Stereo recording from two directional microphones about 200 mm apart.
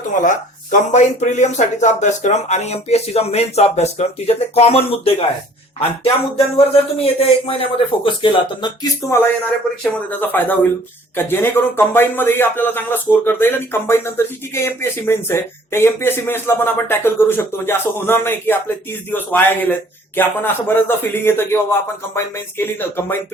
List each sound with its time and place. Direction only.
0.1 s speech: 40° left (ahead or behind); by 23.1 s 10° left (ahead or behind)